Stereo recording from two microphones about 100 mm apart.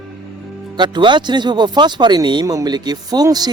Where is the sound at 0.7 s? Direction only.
50° right (ahead or behind).